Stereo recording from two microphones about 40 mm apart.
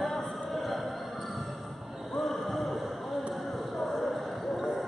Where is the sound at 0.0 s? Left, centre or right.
Centre.